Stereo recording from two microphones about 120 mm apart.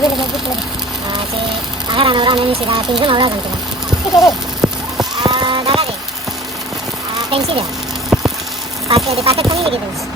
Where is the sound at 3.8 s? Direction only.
5° right (ahead or behind).